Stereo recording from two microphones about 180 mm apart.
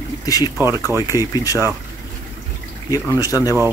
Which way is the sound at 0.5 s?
15° right (ahead or behind).